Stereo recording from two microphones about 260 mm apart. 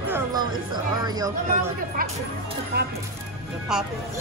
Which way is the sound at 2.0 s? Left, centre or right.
Right.